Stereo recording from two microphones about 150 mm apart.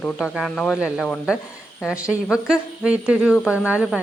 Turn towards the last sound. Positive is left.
turn(degrees=-5)  # may be behind; listen again after turning